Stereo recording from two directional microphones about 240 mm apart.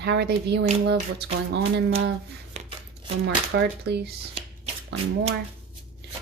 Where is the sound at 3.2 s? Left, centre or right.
Right.